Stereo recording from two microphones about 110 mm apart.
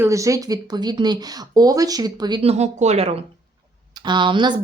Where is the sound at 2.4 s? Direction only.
85° right.